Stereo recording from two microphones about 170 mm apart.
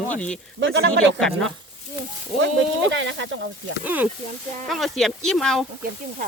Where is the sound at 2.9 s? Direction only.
90° right.